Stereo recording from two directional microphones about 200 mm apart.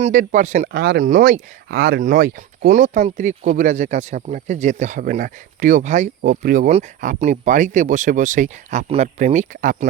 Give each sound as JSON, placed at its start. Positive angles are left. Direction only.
{"t": 0.0, "sound": "speech", "side_deg": -40}
{"t": 0.7, "sound": "speech", "side_deg": -60}